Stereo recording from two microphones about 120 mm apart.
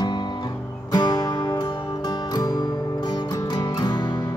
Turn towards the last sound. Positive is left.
turn(degrees=35)  # may be behind; listen again after turning